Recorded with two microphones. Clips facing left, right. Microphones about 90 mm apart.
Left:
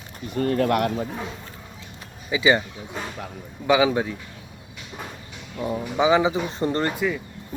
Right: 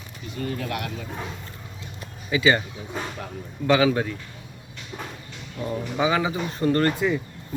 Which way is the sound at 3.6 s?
15° left (ahead or behind).